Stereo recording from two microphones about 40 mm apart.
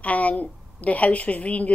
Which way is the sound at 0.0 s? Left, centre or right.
Left.